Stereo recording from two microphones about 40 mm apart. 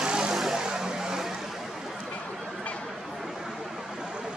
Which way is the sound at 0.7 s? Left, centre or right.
Centre.